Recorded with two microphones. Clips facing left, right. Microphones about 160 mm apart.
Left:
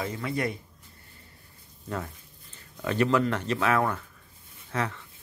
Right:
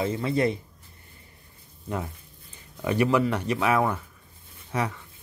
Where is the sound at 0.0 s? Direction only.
25° right (ahead or behind).